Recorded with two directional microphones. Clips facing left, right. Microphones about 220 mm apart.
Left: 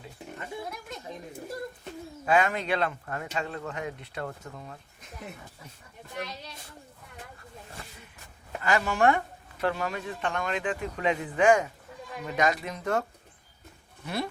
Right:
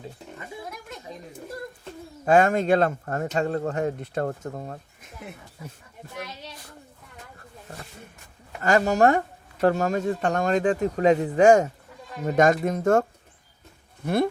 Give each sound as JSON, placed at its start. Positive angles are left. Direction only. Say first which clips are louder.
{"t": 2.2, "sound": "speech", "louder": "right 7 dB", "side_deg": -45}
{"t": 8.6, "sound": "speech", "louder": "right 5 dB", "side_deg": -40}